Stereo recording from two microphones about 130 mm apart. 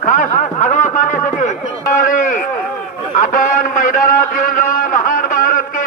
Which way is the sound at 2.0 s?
90° left.